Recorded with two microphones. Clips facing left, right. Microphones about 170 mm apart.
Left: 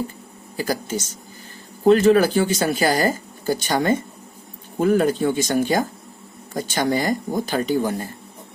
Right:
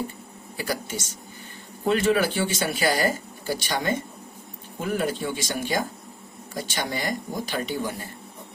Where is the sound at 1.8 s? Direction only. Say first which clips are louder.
Left 8 dB; 40° left (ahead or behind).